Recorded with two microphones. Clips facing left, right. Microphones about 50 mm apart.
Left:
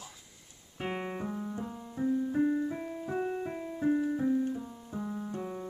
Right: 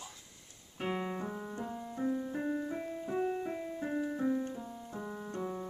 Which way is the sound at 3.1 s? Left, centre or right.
Centre.